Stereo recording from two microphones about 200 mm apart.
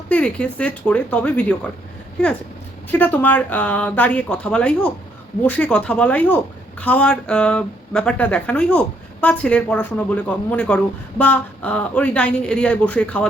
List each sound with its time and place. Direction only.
0.1 s a woman's voice: 5° left (ahead or behind)
2.9 s a woman's voice: 10° left (ahead or behind)